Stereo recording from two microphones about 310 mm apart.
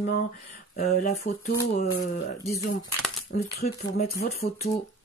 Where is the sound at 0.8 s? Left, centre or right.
Left.